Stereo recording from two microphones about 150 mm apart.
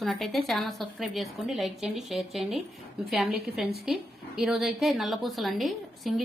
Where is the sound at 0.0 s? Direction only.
Centre (ahead or behind).